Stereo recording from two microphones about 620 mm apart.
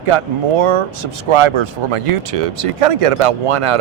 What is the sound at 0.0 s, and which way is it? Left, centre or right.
Speech, right.